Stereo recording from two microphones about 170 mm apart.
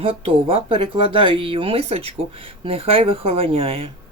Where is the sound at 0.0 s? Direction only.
35° right (ahead or behind).